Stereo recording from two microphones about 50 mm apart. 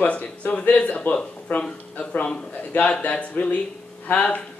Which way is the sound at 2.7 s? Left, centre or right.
Left.